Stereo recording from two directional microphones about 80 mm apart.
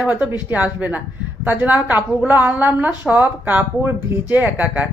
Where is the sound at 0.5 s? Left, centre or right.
Centre.